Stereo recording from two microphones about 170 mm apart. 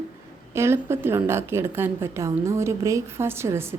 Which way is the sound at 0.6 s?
15° right (ahead or behind).